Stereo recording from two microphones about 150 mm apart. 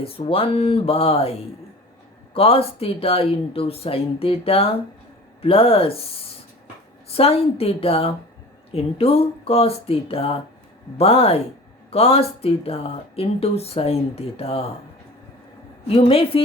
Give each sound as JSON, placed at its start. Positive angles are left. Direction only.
{"t": 0.0, "sound": "speech", "side_deg": 40}
{"t": 7.1, "sound": "speech", "side_deg": 40}
{"t": 15.9, "sound": "speech", "side_deg": 40}